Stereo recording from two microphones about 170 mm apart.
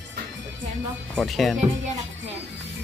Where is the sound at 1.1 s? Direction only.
Centre (ahead or behind).